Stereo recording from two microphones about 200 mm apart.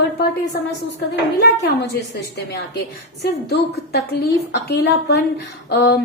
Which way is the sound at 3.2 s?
55° left (ahead or behind).